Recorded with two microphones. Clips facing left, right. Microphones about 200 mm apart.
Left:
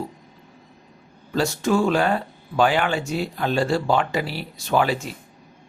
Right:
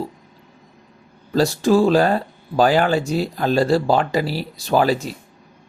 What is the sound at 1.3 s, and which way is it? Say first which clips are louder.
Speech: right 5 dB; 35° right (ahead or behind).